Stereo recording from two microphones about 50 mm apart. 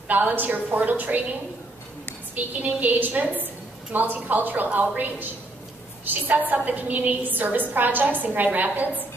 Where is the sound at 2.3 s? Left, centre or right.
Right.